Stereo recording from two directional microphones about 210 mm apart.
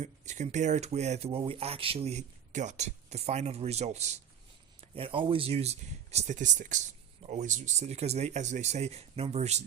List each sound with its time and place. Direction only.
0.0 s speech: 35° right (ahead or behind)